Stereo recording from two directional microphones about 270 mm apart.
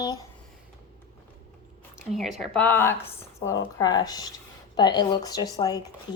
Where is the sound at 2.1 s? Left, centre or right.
Centre.